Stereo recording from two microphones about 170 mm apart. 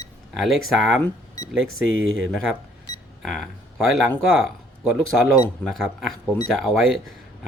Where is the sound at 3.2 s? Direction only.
Centre (ahead or behind).